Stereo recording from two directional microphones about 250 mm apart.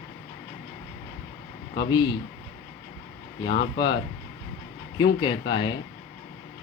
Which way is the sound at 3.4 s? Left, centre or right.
Left.